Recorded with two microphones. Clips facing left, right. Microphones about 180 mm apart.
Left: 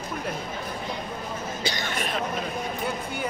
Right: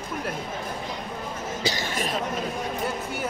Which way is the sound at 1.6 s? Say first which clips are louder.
Right 3 dB; 35° right (ahead or behind).